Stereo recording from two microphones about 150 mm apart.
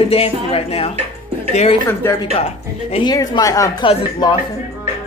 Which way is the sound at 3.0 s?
25° left (ahead or behind).